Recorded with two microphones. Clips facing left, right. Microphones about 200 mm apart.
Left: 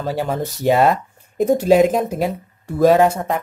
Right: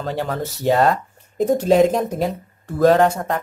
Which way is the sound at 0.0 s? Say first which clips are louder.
Left 2 dB; 5° left (ahead or behind).